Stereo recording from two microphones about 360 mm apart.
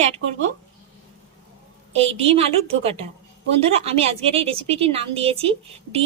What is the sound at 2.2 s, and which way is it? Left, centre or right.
Speech, centre.